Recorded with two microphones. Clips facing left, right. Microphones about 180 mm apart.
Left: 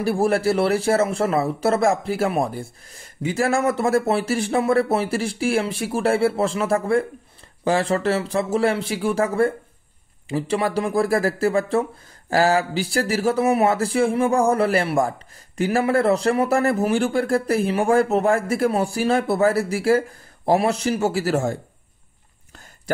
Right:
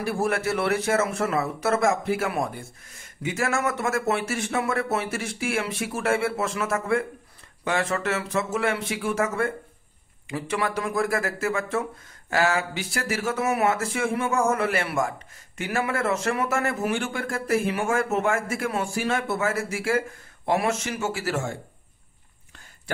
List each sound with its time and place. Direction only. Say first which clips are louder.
0.0 s speech: left 6 dB; 30° left (ahead or behind)